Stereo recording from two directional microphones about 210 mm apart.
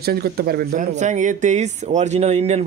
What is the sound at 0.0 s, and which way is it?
A man's voice, 50° right (ahead or behind).